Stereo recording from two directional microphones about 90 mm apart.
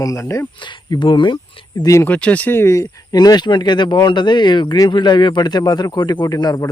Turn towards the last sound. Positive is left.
turn(degrees=45)  # may be behind; listen again after turning